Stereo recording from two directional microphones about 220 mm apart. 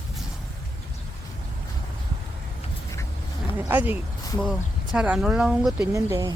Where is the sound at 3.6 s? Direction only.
10° right (ahead or behind).